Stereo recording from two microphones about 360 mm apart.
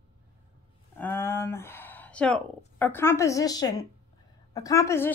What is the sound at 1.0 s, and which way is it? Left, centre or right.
A woman's voice, centre.